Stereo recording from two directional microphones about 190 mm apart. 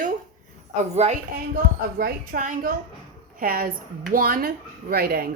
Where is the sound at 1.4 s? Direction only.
50° right (ahead or behind).